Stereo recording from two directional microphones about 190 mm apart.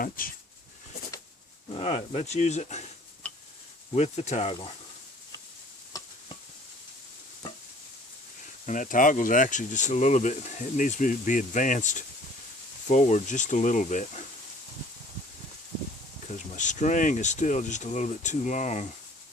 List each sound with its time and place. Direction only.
0.2 s speech: 50° left (ahead or behind)
1.7 s speech: 35° left (ahead or behind)
3.9 s speech: 35° left (ahead or behind)
8.6 s speech: 40° left (ahead or behind)
16.6 s speech: 40° left (ahead or behind)